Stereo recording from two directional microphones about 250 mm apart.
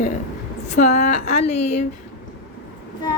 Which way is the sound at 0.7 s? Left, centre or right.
Left.